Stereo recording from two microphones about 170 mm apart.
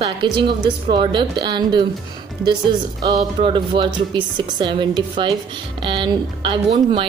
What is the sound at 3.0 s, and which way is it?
A woman's voice, 25° right (ahead or behind).